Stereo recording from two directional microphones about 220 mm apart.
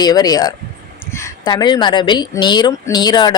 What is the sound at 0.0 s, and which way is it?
Speech, 15° left (ahead or behind).